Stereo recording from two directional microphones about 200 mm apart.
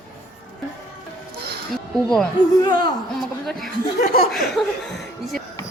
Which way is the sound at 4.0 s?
45° left (ahead or behind).